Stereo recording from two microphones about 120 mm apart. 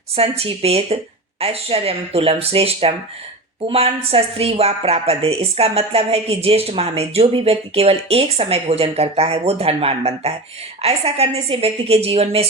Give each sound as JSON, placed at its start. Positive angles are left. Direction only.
{"t": 0.2, "sound": "a woman's voice", "side_deg": -55}